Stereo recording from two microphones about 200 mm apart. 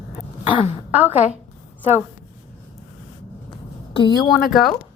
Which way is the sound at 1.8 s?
10° right (ahead or behind).